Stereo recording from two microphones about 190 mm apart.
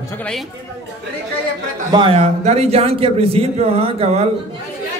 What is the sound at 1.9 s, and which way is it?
A man's voice, 30° right (ahead or behind).